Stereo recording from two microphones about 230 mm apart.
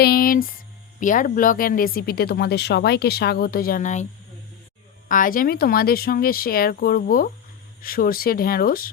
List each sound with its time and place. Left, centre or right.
0.0 s a sound: left
0.9 s speech: left
5.0 s speech: left